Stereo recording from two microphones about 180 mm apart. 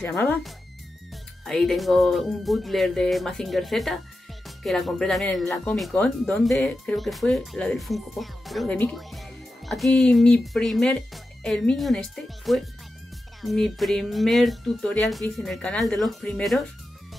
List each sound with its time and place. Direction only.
0.0 s speech: 10° left (ahead or behind)
1.1 s speech: centre (ahead or behind)